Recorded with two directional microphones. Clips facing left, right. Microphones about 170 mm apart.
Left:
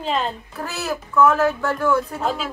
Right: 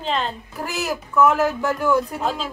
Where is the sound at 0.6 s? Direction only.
15° right (ahead or behind).